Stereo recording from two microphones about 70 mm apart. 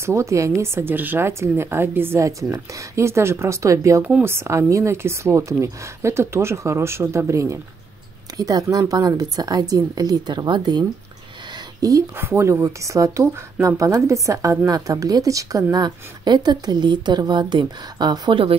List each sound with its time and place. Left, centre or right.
0.0 s a woman's voice: right
4.2 s a woman's voice: right
8.4 s speech: right
11.8 s speech: right
12.2 s speech: right
14.7 s speech: right
15.7 s a woman's voice: right